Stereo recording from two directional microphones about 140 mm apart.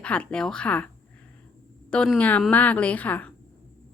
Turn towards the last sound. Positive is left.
turn(degrees=10)  # may be behind; listen again after turning